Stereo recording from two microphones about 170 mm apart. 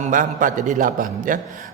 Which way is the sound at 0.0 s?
50° right (ahead or behind).